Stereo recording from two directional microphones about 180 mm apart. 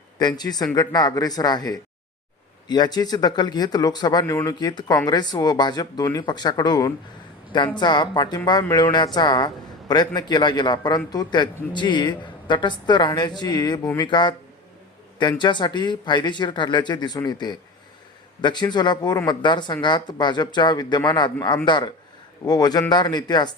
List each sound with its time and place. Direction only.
0.2 s a man's voice: 25° left (ahead or behind)